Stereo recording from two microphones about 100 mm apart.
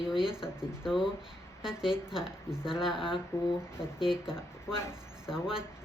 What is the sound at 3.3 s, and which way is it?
Speech, 30° left (ahead or behind).